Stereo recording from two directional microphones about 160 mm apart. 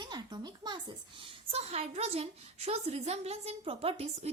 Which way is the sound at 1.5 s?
40° right (ahead or behind).